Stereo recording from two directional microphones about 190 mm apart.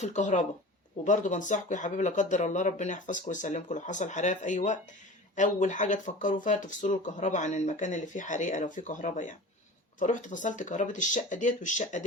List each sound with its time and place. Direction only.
0.0 s speech: 40° left (ahead or behind)